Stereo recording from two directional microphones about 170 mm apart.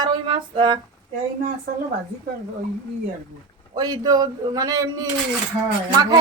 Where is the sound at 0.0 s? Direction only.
30° right (ahead or behind).